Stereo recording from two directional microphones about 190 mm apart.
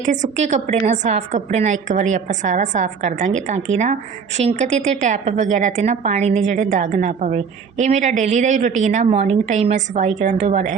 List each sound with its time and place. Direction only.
0.0 s a woman's voice: 40° right (ahead or behind)